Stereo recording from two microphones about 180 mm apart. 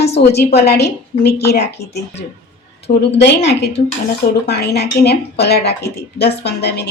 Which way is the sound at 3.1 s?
70° left (ahead or behind).